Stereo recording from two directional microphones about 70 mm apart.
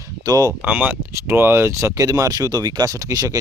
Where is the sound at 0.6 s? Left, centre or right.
Right.